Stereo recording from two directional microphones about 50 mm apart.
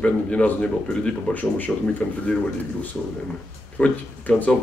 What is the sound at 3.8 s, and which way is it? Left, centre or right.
Speech, left.